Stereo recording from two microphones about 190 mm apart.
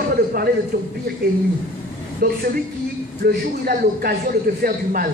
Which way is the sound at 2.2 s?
50° right (ahead or behind).